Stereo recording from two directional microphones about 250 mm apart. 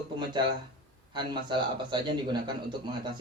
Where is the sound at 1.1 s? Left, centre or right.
Centre.